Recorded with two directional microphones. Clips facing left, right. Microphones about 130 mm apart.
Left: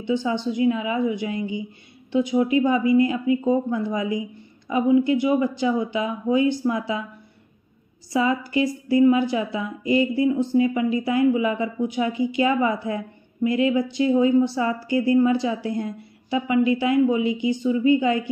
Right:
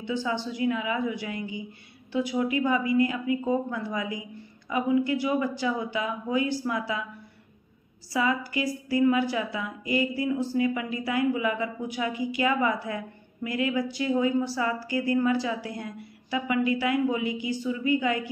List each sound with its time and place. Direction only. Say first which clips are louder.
0.0 s a woman's voice: left 6 dB; 20° left (ahead or behind)
8.1 s a woman's voice: left 5 dB; 25° left (ahead or behind)